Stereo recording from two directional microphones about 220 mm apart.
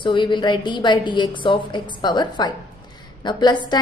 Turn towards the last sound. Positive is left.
turn(degrees=20)  # may be behind; listen again after turning